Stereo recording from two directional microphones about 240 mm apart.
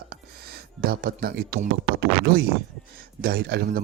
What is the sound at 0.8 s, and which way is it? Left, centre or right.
A man's voice, right.